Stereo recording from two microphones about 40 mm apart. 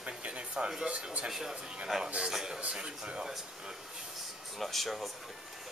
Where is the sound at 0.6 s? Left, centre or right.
Centre.